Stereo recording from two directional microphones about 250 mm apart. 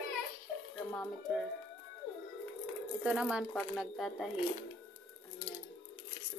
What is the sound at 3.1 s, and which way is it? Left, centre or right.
Speech, centre.